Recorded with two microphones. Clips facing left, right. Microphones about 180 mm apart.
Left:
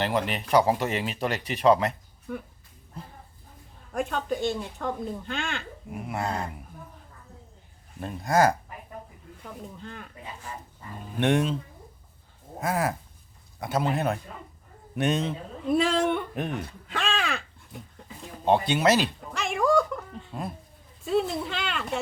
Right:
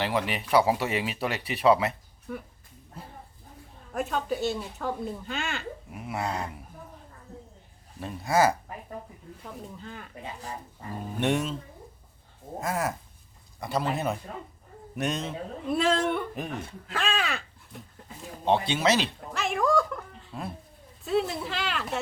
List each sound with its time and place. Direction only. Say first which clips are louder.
0.0 s speech: left 1 dB; 5° right (ahead or behind)
3.9 s speech: left 1 dB; 5° right (ahead or behind)
6.2 s speech: left 1 dB; 35° left (ahead or behind)
8.0 s speech: left 1 dB; centre (ahead or behind)
9.7 s speech: left 1 dB; centre (ahead or behind)
10.5 s speech: right 1 dB; 35° right (ahead or behind)
12.5 s speech: left 2 dB; centre (ahead or behind)